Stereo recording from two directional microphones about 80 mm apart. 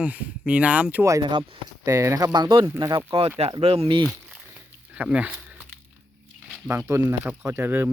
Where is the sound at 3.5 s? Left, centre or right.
Right.